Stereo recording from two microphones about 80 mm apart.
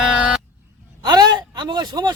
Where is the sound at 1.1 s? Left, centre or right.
Right.